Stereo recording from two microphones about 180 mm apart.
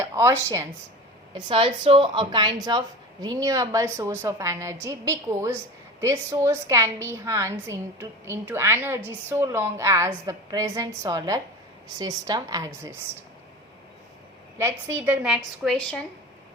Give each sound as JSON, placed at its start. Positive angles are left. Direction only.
{"t": 0.0, "sound": "speech", "side_deg": -15}
{"t": 1.3, "sound": "a woman's voice", "side_deg": -30}
{"t": 14.6, "sound": "a woman's voice", "side_deg": -10}